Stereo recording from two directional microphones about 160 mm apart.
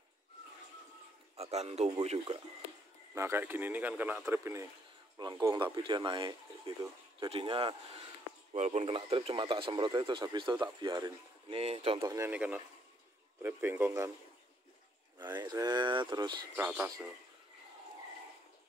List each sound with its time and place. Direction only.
1.3 s a man's voice: 40° right (ahead or behind)
3.2 s speech: 15° right (ahead or behind); by 8.0 s 35° right (ahead or behind)
8.5 s speech: 45° right (ahead or behind)
12.0 s speech: 20° right (ahead or behind)
15.3 s speech: 25° right (ahead or behind)
16.5 s speech: 10° right (ahead or behind)